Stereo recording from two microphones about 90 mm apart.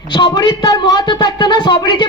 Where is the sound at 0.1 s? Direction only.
50° left (ahead or behind).